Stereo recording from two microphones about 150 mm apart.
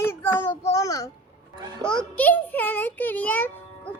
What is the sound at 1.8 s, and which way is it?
A child's voice, 5° left (ahead or behind).